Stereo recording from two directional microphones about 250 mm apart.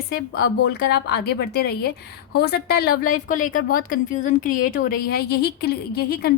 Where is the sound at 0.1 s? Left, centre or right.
Left.